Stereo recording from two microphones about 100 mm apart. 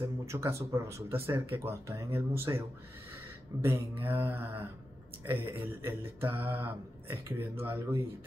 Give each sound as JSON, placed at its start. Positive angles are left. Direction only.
{"t": 0.2, "sound": "mantra", "side_deg": -30}
{"t": 3.6, "sound": "mantra", "side_deg": -20}